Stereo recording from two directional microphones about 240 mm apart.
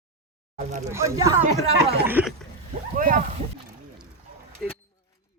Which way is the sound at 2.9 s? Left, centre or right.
Right.